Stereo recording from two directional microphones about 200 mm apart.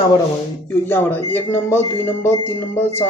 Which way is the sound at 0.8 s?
10° left (ahead or behind).